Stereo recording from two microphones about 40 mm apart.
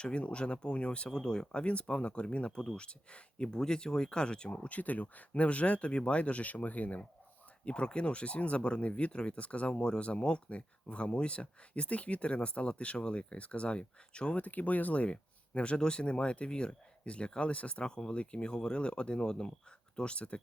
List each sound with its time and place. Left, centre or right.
0.0 s speech: left
1.6 s speech: left
4.5 s speech: left
7.6 s speech: left
14.3 s speech: left
15.0 s speech: left